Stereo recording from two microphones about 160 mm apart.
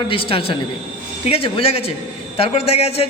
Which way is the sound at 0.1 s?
35° left (ahead or behind).